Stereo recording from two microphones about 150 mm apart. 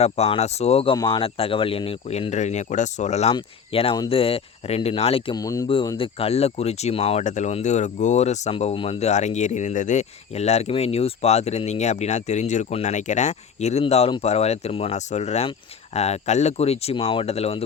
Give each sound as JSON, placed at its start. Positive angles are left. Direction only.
{"t": 0.0, "sound": "speech", "side_deg": 45}
{"t": 0.9, "sound": "speech", "side_deg": 30}
{"t": 3.3, "sound": "speech", "side_deg": 40}
{"t": 5.4, "sound": "speech", "side_deg": 20}
{"t": 5.6, "sound": "speech", "side_deg": 35}